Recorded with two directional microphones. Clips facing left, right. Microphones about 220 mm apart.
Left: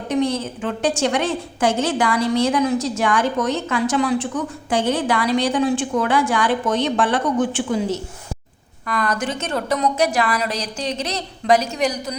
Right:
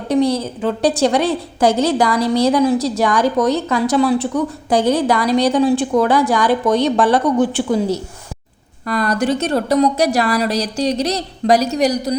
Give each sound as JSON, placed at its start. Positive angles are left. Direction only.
{"t": 0.1, "sound": "a woman's voice", "side_deg": -35}